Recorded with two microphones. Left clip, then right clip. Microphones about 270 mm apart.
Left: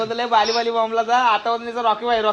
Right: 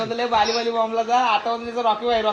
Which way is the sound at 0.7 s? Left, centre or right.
Left.